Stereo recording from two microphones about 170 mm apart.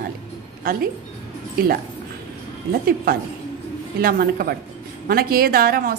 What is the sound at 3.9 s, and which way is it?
A woman's voice, 60° right (ahead or behind).